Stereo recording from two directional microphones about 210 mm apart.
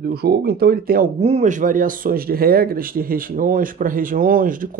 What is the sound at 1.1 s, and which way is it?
Speech, 30° right (ahead or behind).